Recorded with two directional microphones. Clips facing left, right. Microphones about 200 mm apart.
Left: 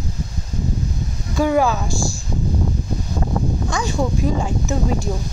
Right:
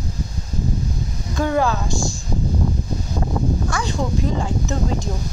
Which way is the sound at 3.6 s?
20° left (ahead or behind).